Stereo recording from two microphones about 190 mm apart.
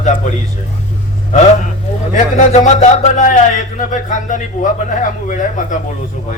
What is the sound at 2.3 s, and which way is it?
Speech, 35° left (ahead or behind).